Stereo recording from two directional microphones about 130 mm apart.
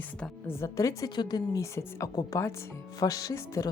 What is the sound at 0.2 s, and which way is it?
Speech, 20° left (ahead or behind).